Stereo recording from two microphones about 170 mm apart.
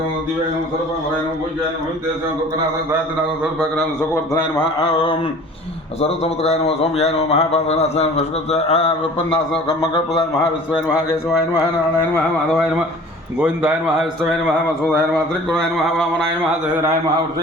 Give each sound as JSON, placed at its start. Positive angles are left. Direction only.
{"t": 6.0, "sound": "a man's voice", "side_deg": 40}